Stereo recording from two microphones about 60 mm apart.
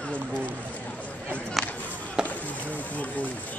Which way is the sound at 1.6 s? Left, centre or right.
Centre.